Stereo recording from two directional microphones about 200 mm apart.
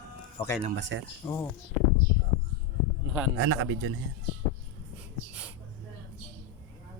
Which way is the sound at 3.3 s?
80° right.